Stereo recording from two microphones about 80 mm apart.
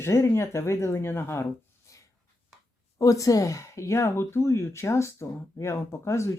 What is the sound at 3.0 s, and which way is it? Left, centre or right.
Speech, left.